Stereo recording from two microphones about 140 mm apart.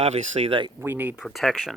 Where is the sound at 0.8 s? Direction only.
15° right (ahead or behind).